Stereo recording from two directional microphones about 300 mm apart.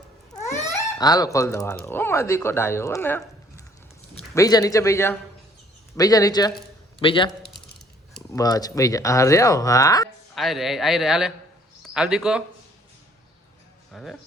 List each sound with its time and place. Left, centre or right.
0.9 s speech: centre
10.3 s speech: centre
13.9 s speech: centre